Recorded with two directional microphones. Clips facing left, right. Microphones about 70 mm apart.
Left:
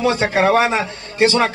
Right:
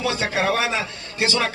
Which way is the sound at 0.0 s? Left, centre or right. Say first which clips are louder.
Left 7 dB; left.